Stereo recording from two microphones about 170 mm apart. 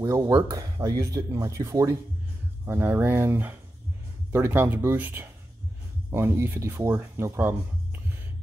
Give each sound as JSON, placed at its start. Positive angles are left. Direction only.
{"t": 0.0, "sound": "speech", "side_deg": -20}